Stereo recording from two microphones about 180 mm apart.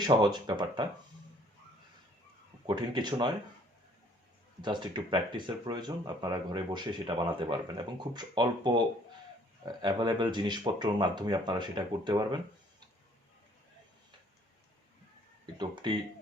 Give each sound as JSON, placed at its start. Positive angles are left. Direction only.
{"t": 0.0, "sound": "speech", "side_deg": -25}
{"t": 2.6, "sound": "speech", "side_deg": -25}
{"t": 4.6, "sound": "speech", "side_deg": -25}
{"t": 9.8, "sound": "speech", "side_deg": -25}
{"t": 15.5, "sound": "speech", "side_deg": -25}